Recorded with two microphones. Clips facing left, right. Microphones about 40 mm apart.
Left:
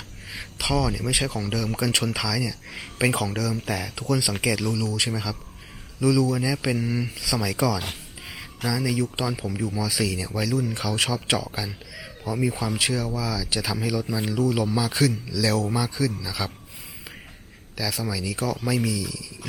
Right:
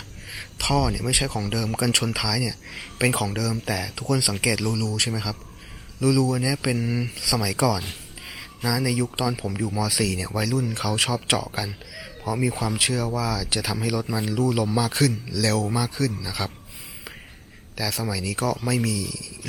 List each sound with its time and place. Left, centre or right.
0.3 s speech: centre
17.7 s speech: centre